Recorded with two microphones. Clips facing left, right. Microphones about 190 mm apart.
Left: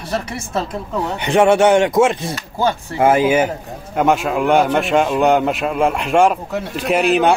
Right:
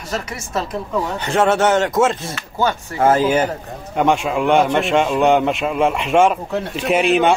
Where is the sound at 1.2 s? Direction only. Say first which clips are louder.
Left 4 dB; 15° left (ahead or behind).